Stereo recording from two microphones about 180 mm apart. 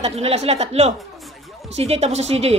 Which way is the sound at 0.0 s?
35° right (ahead or behind).